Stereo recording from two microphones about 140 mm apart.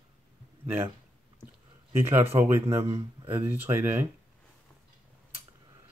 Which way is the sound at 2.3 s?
15° right (ahead or behind).